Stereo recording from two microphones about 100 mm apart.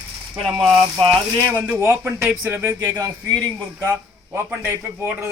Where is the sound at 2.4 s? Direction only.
20° right (ahead or behind).